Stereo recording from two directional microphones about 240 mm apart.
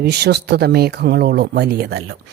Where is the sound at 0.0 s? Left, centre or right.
Right.